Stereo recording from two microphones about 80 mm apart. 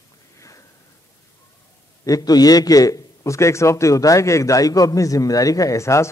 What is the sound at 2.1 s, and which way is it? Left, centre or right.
A man's voice, left.